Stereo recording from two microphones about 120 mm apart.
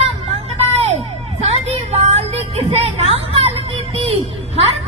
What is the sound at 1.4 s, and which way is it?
Music, 60° right (ahead or behind).